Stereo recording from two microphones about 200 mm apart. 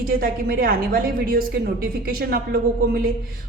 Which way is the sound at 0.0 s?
45° right (ahead or behind).